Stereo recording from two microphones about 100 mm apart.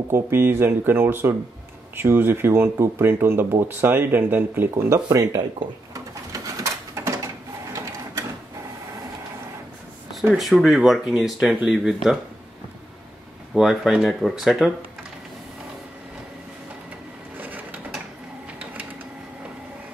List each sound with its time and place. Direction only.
0.1 s speech: 20° right (ahead or behind)
5.9 s bird: 35° right (ahead or behind)
10.3 s speech: 5° right (ahead or behind)
13.6 s speech: centre (ahead or behind)
17.4 s mechanisms: 15° right (ahead or behind)